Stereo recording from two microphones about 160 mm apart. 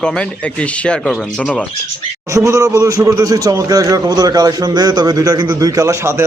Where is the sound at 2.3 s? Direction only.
20° right (ahead or behind).